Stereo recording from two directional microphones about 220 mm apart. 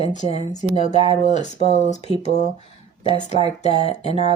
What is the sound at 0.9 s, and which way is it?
Speech, 25° right (ahead or behind).